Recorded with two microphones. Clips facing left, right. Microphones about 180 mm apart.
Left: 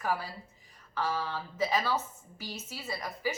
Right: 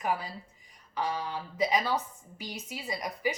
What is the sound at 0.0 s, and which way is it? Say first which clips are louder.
A woman's voice: right 1 dB; 15° right (ahead or behind).